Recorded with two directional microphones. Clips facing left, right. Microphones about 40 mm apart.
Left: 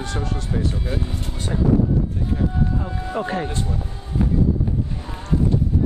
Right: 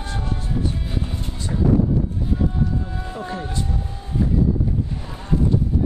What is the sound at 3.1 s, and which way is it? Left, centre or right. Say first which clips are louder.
Speech: left 5 dB; left.